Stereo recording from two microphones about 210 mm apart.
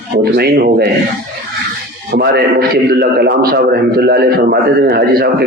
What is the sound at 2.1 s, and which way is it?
A man's voice, 50° right (ahead or behind).